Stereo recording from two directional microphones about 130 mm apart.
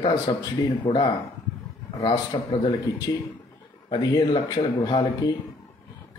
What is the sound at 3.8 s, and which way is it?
Speech, 40° left (ahead or behind).